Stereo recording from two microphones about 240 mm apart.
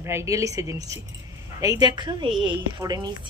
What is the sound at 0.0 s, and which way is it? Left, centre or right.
A woman's voice, centre.